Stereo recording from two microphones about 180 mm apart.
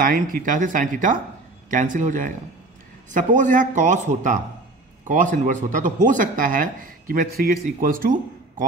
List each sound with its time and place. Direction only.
0.0 s speech: 50° right (ahead or behind)